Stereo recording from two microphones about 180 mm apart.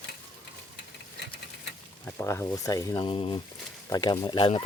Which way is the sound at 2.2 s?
15° left (ahead or behind).